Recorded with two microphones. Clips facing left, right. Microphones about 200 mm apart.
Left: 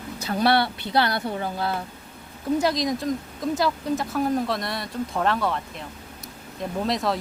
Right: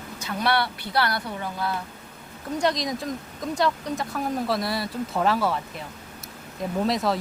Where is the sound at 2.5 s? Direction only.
5° left (ahead or behind).